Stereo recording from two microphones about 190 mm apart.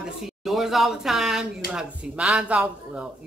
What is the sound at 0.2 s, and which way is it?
Speech, centre (ahead or behind).